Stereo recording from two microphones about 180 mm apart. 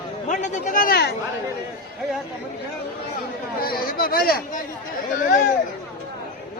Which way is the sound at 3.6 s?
55° left (ahead or behind).